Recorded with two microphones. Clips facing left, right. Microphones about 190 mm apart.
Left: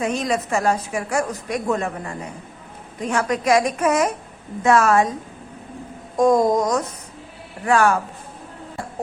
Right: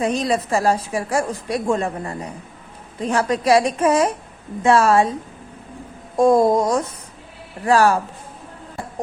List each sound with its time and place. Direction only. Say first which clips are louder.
0.0 s a woman's voice: right 2 dB; 35° right (ahead or behind)
6.1 s a woman's voice: right 2 dB; 30° right (ahead or behind)